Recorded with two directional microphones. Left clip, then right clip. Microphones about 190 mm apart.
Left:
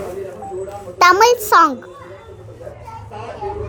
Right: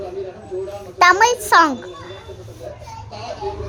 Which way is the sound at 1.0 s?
10° left (ahead or behind).